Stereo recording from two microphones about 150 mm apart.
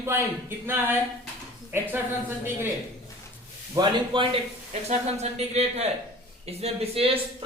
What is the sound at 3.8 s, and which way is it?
Speech, 35° right (ahead or behind).